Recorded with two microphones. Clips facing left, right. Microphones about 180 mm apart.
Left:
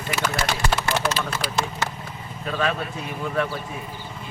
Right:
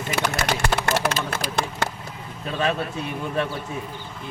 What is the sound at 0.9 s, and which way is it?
Speech, 50° right (ahead or behind).